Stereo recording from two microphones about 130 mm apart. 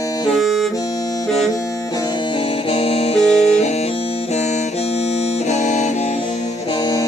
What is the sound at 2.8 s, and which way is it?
Music, 50° left (ahead or behind).